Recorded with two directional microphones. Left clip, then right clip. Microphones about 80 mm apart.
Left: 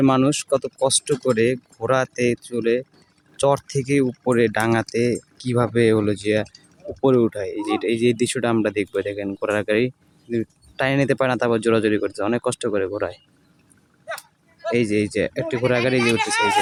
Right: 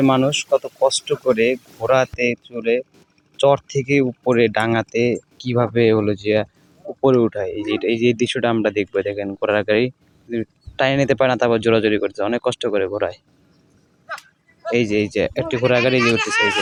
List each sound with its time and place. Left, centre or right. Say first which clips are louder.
0.3 s speech: right 3 dB; centre
4.0 s speech: right 2 dB; centre
7.3 s speech: right 2 dB; centre
14.6 s speech: right 2 dB; centre